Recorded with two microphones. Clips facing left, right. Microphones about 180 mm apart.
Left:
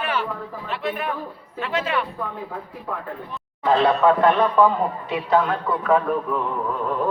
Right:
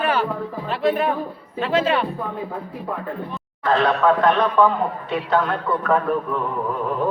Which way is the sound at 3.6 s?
10° left (ahead or behind).